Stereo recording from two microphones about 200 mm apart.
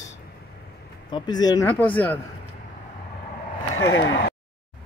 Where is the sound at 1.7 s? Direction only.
10° left (ahead or behind).